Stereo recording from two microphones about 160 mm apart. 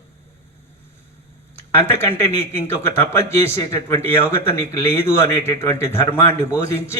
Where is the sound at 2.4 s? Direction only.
15° left (ahead or behind).